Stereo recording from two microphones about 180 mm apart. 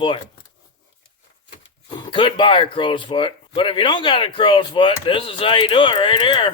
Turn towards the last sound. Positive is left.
turn(degrees=30)  # may be behind; listen again after turning